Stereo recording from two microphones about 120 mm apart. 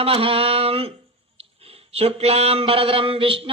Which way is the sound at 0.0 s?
50° right (ahead or behind).